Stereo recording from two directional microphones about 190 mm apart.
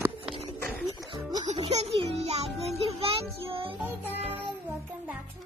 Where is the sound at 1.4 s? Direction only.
35° right (ahead or behind).